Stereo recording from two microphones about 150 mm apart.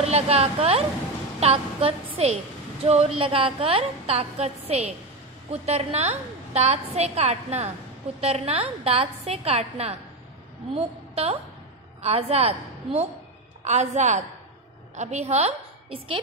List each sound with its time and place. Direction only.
0.0 s a woman's voice: 45° right (ahead or behind)